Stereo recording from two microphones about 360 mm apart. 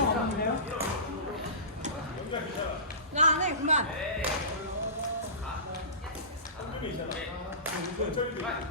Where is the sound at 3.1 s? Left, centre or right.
Centre.